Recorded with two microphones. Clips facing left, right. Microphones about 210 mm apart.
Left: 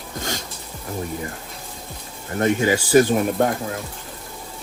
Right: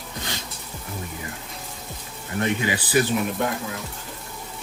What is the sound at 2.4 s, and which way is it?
Speech, 45° left (ahead or behind).